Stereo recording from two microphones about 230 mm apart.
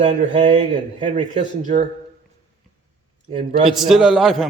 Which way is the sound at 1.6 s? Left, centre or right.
Right.